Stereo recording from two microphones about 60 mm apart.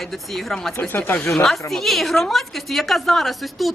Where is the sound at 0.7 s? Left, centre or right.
Left.